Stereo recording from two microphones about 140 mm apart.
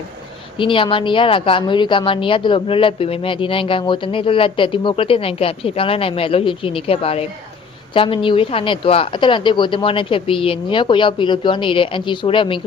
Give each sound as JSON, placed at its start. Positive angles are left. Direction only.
{"t": 0.6, "sound": "a woman's voice", "side_deg": 35}